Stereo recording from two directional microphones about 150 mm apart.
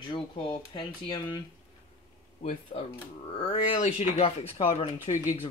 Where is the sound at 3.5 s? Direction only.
50° left (ahead or behind).